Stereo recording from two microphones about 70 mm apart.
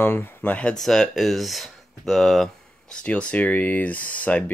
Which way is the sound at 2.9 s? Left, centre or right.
Centre.